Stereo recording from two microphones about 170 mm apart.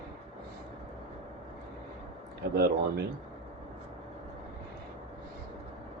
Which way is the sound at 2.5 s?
70° right (ahead or behind).